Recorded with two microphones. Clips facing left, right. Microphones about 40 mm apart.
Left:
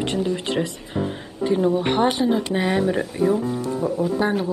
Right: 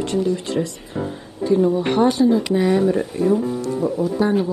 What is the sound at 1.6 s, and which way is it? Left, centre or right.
Speech, centre.